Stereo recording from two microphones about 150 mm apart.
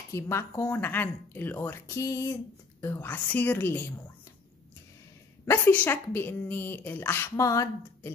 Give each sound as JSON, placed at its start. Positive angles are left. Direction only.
{"t": 0.1, "sound": "a woman's voice", "side_deg": 20}
{"t": 5.4, "sound": "a woman's voice", "side_deg": 15}